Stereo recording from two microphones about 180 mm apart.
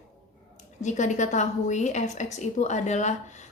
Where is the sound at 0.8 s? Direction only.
40° left (ahead or behind).